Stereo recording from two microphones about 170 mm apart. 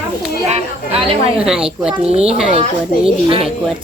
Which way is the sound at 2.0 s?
35° right (ahead or behind).